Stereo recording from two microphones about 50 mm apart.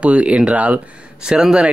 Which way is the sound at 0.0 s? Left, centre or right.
Right.